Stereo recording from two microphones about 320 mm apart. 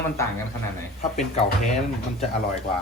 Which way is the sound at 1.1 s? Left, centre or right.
Left.